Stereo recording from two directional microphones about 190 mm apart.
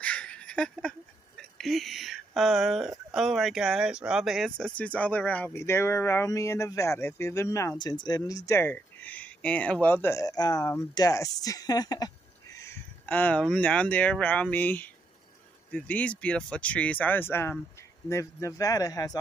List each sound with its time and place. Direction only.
0.0 s speech: 5° left (ahead or behind)